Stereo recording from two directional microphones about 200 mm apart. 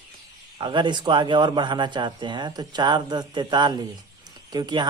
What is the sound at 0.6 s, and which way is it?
A man's voice, 25° right (ahead or behind).